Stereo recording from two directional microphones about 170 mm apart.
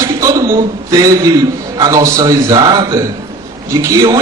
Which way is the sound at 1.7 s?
20° right (ahead or behind).